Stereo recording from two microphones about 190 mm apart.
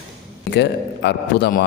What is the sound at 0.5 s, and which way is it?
A man's voice, 60° left (ahead or behind).